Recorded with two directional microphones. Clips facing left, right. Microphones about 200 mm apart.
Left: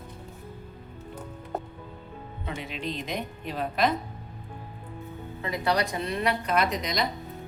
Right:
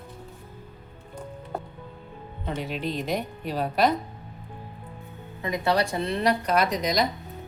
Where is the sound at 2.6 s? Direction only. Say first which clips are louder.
Right 5 dB; centre (ahead or behind).